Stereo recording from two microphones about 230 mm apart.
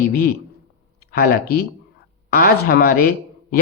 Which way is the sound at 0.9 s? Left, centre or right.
Left.